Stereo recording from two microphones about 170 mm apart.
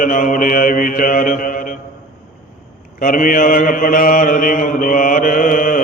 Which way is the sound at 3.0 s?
55° left (ahead or behind).